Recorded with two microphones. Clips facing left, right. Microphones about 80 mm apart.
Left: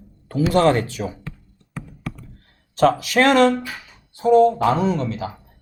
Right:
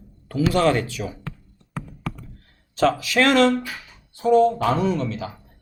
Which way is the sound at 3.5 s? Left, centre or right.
Centre.